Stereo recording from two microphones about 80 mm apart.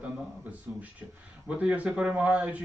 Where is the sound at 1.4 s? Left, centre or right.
Centre.